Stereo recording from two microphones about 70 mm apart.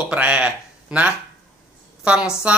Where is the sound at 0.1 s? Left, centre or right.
Centre.